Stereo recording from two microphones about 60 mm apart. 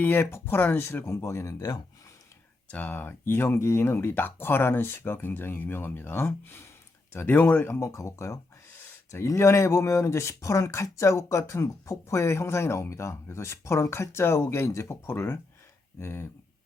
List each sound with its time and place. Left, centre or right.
0.0 s speech: left
1.0 s speech: left
1.5 s speech: left
2.6 s speech: left
2.9 s speech: left
7.8 s speech: left